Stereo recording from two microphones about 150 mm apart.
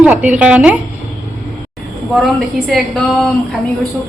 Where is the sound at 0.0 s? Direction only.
10° right (ahead or behind).